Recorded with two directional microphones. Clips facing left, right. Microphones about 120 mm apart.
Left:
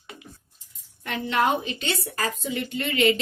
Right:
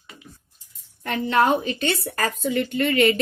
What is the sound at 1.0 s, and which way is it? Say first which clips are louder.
A woman's voice: right 4 dB; 45° right (ahead or behind).